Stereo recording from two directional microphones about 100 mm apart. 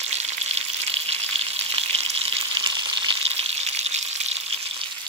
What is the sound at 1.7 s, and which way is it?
Frying, 70° right (ahead or behind).